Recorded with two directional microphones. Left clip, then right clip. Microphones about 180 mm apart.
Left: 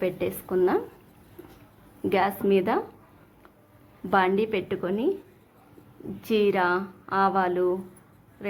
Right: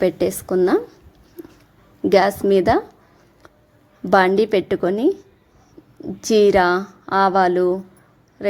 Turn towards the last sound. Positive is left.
turn(degrees=-45)  # may be behind; listen again after turning